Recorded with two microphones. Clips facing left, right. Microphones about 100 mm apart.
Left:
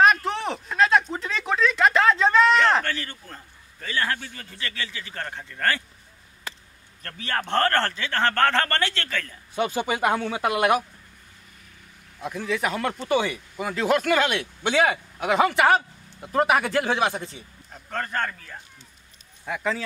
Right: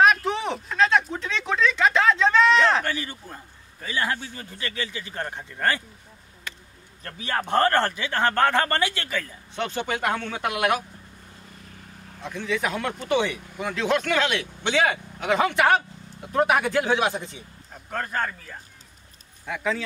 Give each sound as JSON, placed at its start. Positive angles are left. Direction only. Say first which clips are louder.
{"t": 0.0, "sound": "a sound", "louder": "even", "side_deg": 0}
{"t": 2.8, "sound": "a man's voice", "louder": "right 1 dB", "side_deg": -15}
{"t": 7.0, "sound": "a man's voice", "louder": "right 1 dB", "side_deg": -15}
{"t": 9.6, "sound": "speech", "louder": "left 3 dB", "side_deg": 5}
{"t": 12.2, "sound": "a man's voice", "louder": "left 1 dB", "side_deg": 5}